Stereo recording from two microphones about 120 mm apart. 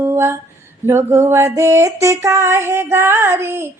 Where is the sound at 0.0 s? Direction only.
20° right (ahead or behind).